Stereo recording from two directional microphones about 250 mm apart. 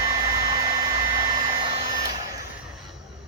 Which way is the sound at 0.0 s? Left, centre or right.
Centre.